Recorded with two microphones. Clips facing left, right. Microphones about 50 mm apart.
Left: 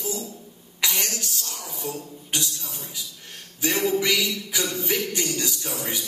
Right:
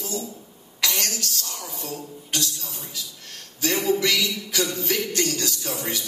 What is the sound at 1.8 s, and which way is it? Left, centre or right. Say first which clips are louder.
Speech: left 1 dB; centre.